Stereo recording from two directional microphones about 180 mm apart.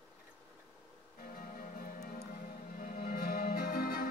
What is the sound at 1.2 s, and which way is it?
Music, 50° left (ahead or behind).